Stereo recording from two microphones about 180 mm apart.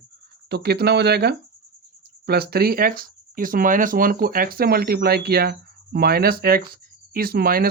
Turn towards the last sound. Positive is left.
turn(degrees=-55)  # may be behind; listen again after turning